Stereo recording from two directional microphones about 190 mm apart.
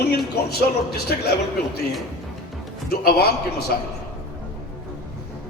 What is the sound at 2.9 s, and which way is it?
Speech, 55° left (ahead or behind).